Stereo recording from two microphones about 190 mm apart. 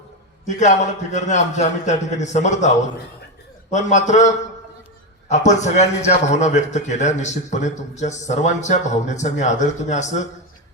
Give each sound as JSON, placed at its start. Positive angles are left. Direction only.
{"t": 0.4, "sound": "a man's voice", "side_deg": 40}
{"t": 5.5, "sound": "a man's voice", "side_deg": 40}